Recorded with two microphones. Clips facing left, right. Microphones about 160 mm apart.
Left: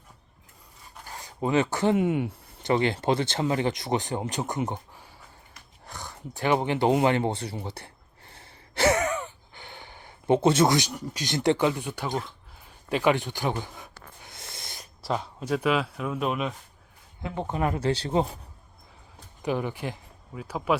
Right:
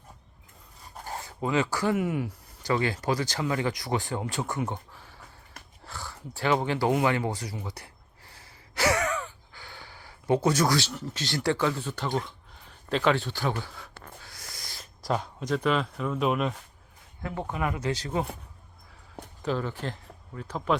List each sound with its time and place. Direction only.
1.2 s speech: 20° left (ahead or behind)
8.3 s gasp: 25° left (ahead or behind); by 12.3 s 10° left (ahead or behind)
12.9 s speech: 10° left (ahead or behind)
14.2 s owl: 25° left (ahead or behind)
15.0 s speech: 5° left (ahead or behind)
17.2 s speech: 20° left (ahead or behind)
17.5 s speech: 30° left (ahead or behind)
19.4 s speech: 15° left (ahead or behind)